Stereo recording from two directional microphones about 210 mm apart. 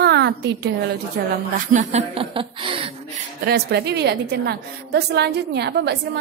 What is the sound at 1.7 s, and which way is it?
A woman's voice, 30° right (ahead or behind).